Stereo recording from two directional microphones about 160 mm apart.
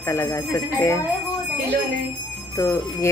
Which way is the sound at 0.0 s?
20° left (ahead or behind).